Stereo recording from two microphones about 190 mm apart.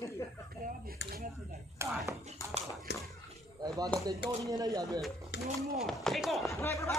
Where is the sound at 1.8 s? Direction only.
15° right (ahead or behind).